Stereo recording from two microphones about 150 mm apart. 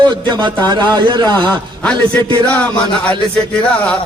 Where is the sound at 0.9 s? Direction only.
30° right (ahead or behind).